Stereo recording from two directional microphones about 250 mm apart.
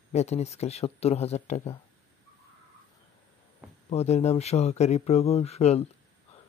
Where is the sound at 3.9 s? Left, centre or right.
Left.